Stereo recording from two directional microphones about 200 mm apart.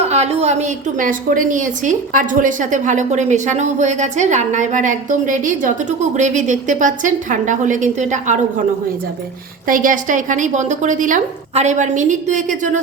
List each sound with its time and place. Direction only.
0.0 s a woman's voice: 30° right (ahead or behind)
9.6 s a woman's voice: 45° right (ahead or behind)